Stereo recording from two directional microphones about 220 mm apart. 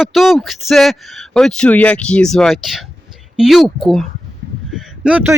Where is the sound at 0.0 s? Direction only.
Centre (ahead or behind).